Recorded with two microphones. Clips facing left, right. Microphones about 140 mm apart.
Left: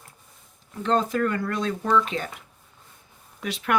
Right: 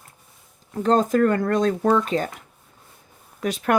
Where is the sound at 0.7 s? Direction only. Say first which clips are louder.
Right 5 dB; 40° right (ahead or behind).